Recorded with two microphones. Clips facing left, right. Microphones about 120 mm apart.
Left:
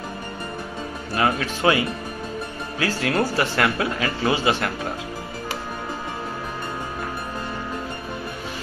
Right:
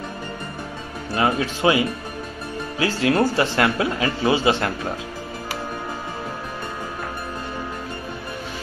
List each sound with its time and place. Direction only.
1.1 s speech: 25° right (ahead or behind)
2.8 s speech: 20° right (ahead or behind)